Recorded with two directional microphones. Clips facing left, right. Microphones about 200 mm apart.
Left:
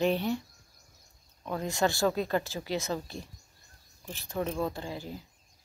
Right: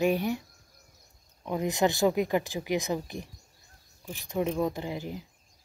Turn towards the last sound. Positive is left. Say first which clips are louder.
# right 3 dB
turn(degrees=-20)  # may be behind; listen again after turning